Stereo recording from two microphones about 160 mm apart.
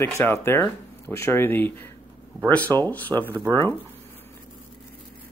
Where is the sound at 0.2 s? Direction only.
15° left (ahead or behind).